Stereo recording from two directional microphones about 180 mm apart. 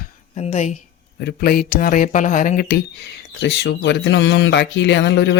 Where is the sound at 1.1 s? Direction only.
60° left (ahead or behind).